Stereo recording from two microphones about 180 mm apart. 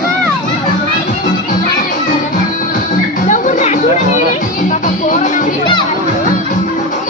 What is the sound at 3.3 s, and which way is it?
Music, 45° left (ahead or behind).